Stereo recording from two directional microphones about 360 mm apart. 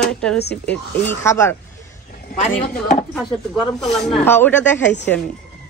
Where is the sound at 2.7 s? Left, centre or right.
Left.